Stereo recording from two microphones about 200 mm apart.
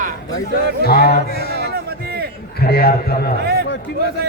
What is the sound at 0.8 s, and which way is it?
Music, 50° left (ahead or behind).